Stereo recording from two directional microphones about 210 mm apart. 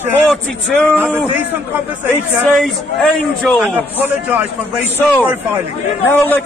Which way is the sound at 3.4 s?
5° left (ahead or behind).